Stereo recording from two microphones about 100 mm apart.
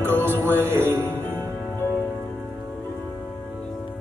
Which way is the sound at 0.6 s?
25° right (ahead or behind).